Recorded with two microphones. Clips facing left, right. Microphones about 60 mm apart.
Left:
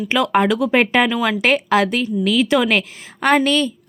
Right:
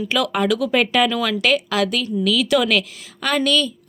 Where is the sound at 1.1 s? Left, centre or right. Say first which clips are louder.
Left 2 dB; left.